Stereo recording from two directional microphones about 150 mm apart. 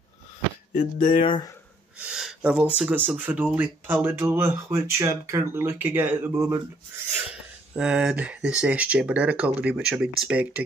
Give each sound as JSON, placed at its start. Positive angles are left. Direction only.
{"t": 0.9, "sound": "speech", "side_deg": 65}
{"t": 1.2, "sound": "speech", "side_deg": 30}
{"t": 2.0, "sound": "speech", "side_deg": -5}
{"t": 7.7, "sound": "speech", "side_deg": -5}